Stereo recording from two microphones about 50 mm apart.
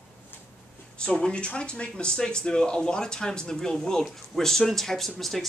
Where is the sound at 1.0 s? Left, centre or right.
Centre.